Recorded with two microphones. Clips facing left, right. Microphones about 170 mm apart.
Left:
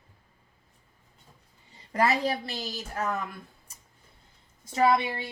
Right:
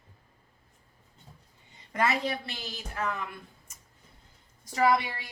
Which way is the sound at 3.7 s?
35° left (ahead or behind).